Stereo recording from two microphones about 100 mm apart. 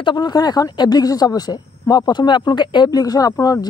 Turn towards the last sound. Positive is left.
turn(degrees=40)  # may be behind; listen again after turning